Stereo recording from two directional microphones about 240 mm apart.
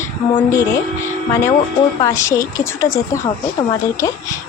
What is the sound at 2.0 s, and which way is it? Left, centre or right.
Speech, centre.